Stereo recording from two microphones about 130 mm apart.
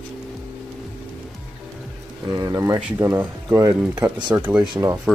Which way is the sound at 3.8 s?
10° right (ahead or behind).